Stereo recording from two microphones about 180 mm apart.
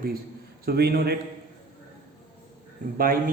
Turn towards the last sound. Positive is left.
turn(degrees=-50)  # may be behind; listen again after turning